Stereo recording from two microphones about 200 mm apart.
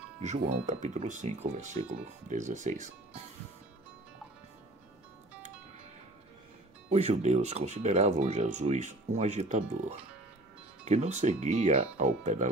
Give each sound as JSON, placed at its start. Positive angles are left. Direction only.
{"t": 0.2, "sound": "speech", "side_deg": -35}
{"t": 6.9, "sound": "speech", "side_deg": -35}